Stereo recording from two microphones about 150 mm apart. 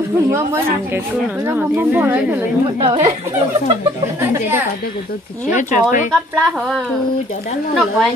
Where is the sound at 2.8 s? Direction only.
40° right (ahead or behind).